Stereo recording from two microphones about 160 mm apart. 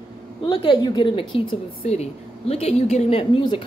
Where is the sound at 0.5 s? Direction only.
30° left (ahead or behind).